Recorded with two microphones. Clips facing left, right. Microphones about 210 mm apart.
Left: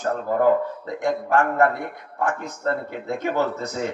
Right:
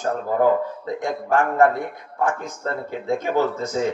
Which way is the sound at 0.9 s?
70° left (ahead or behind).